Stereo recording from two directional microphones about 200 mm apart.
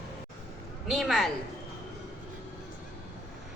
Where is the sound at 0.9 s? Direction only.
Centre (ahead or behind).